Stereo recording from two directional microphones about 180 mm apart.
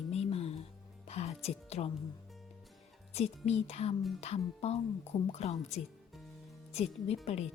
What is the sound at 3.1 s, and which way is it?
Speech, 35° left (ahead or behind).